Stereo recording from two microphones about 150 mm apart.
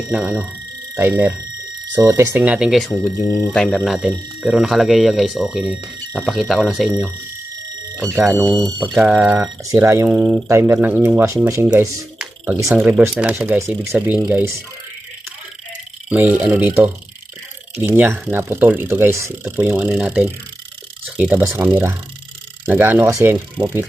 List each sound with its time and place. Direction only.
0.1 s speech: 5° right (ahead or behind)
3.8 s speech: 5° right (ahead or behind)
7.9 s speech: 20° right (ahead or behind)
8.6 s speech: centre (ahead or behind); by 11.7 s 20° right (ahead or behind)
12.7 s speech: 15° right (ahead or behind)
16.0 s speech: 10° right (ahead or behind)